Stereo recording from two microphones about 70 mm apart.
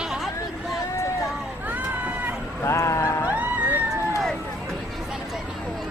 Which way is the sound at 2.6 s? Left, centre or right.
Left.